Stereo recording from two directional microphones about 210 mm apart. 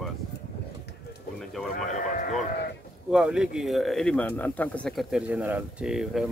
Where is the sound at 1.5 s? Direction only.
Centre (ahead or behind).